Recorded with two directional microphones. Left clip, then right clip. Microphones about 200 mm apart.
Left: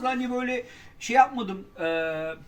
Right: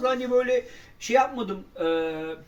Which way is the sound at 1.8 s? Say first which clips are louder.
Right 2 dB; 10° left (ahead or behind).